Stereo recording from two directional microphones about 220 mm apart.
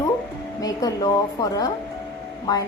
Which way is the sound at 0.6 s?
15° left (ahead or behind).